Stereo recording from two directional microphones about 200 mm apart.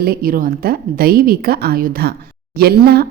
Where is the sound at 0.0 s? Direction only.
50° right (ahead or behind).